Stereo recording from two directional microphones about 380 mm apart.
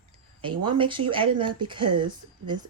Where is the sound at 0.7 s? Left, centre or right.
Centre.